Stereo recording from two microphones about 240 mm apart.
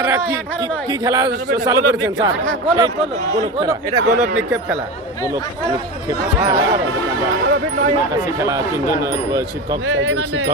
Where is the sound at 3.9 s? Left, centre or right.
Right.